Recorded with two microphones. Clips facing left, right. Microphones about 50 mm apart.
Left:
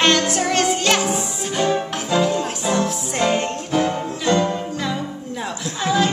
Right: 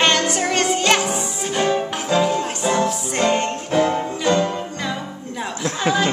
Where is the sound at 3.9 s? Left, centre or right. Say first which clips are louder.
Right 1 dB; centre.